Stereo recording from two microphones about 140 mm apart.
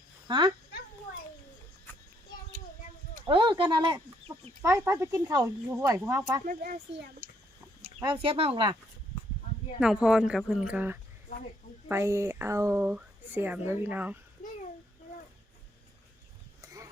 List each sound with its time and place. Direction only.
0.3 s speech: 35° right (ahead or behind)
3.2 s speech: 35° right (ahead or behind)
4.6 s speech: 20° right (ahead or behind)
8.0 s speech: 35° right (ahead or behind)
9.8 s speech: 5° right (ahead or behind)
16.6 s a sound: 25° right (ahead or behind)